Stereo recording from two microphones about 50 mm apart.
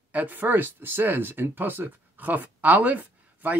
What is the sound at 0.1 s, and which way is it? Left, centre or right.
Speech, right.